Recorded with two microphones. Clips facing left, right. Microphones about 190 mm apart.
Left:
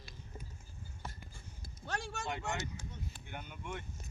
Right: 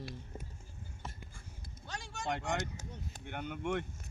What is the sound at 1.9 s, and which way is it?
Speech, 65° left (ahead or behind).